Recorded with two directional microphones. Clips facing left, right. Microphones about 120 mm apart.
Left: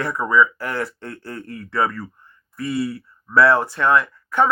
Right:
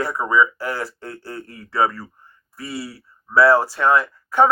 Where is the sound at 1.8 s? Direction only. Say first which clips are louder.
Right 3 dB; 35° right (ahead or behind).